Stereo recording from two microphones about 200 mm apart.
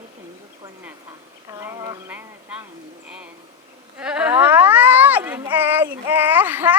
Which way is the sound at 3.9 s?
5° right (ahead or behind).